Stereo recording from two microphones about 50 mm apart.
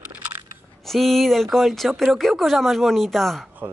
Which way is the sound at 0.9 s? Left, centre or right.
Centre.